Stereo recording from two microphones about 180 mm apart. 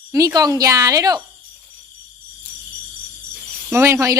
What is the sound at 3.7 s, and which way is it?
Speech, 15° right (ahead or behind).